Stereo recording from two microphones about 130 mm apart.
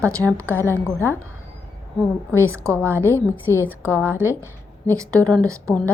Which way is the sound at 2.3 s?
20° right (ahead or behind).